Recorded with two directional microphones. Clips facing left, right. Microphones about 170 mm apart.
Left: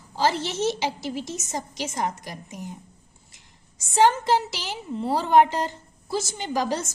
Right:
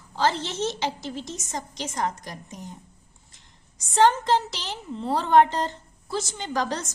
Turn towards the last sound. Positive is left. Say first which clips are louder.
# left 2 dB
turn(degrees=10)  # may be behind; listen again after turning